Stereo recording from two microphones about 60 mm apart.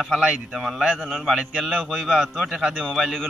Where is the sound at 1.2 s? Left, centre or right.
Centre.